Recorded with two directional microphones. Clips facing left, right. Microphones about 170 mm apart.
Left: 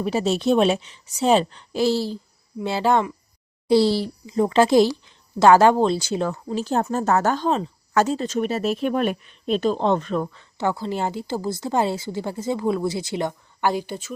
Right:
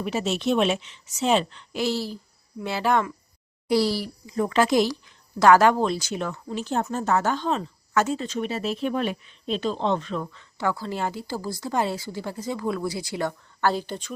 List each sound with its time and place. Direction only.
0.0 s a child's voice: 35° left (ahead or behind)
10.6 s a woman's voice: 25° left (ahead or behind)